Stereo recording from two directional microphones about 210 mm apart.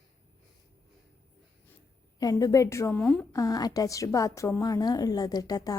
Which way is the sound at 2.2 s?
15° left (ahead or behind).